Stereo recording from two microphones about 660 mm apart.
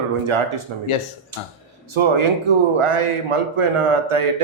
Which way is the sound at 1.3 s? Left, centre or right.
Right.